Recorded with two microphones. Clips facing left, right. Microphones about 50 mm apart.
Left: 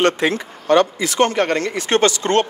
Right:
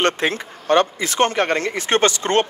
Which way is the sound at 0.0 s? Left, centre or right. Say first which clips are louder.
Left 2 dB; right.